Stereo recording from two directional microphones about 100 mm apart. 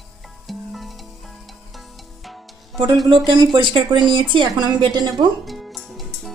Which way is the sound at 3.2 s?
50° right (ahead or behind).